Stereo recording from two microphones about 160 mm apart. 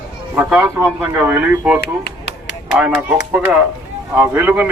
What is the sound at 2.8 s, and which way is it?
Speech, 5° right (ahead or behind).